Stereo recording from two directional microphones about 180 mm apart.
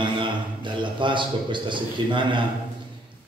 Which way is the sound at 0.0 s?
25° right (ahead or behind).